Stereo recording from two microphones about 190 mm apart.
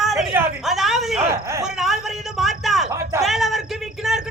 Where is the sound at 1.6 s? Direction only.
Centre (ahead or behind).